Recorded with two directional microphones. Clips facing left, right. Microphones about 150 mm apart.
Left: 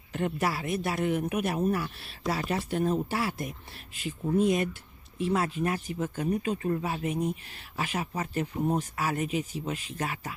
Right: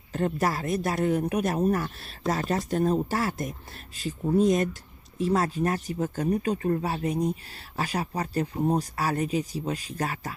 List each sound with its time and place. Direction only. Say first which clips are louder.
0.1 s speech: right 3 dB; 40° right (ahead or behind)